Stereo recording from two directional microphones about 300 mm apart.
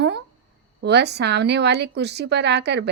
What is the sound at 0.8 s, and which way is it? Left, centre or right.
A woman's voice, right.